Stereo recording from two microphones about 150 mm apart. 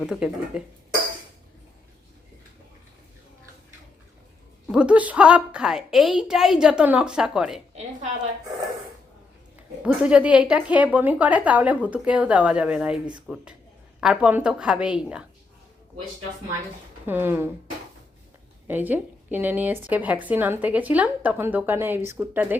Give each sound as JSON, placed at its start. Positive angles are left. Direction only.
{"t": 0.2, "sound": "a woman's voice", "side_deg": -5}
{"t": 4.7, "sound": "a woman's voice", "side_deg": -5}
{"t": 9.8, "sound": "a woman's voice", "side_deg": -5}
{"t": 17.1, "sound": "a woman's voice", "side_deg": -15}
{"t": 18.7, "sound": "a woman's voice", "side_deg": -10}